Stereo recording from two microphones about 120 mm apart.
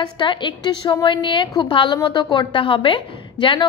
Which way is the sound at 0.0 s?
40° left (ahead or behind).